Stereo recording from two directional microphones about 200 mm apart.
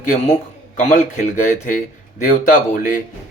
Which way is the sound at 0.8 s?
40° left (ahead or behind).